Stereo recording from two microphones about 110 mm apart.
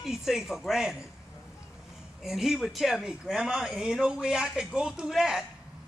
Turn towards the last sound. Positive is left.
turn(degrees=-5)  # may be behind; listen again after turning